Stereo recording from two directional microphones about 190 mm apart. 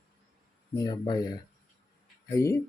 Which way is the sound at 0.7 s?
20° left (ahead or behind).